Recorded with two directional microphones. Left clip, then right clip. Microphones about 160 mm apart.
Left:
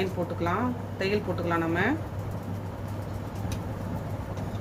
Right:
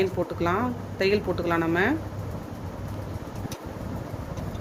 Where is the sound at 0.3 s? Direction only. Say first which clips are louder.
Right 1 dB; 85° right.